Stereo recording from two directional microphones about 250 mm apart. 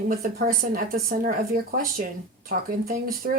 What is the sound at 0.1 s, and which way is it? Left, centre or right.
Speech, right.